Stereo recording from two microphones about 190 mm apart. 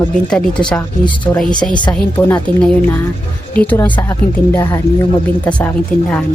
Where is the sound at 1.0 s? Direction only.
25° left (ahead or behind).